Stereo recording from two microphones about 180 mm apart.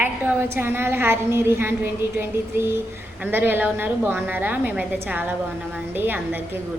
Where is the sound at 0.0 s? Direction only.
10° right (ahead or behind).